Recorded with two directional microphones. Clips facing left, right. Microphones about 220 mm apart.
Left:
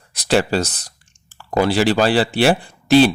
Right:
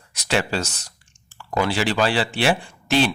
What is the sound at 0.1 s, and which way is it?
A man's voice, 35° left (ahead or behind).